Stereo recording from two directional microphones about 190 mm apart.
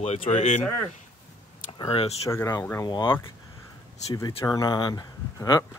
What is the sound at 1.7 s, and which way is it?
Speech, 30° left (ahead or behind).